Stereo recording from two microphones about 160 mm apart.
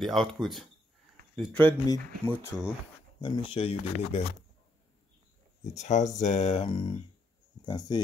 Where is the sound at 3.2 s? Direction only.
35° left (ahead or behind).